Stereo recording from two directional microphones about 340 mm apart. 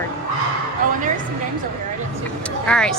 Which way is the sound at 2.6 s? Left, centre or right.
Centre.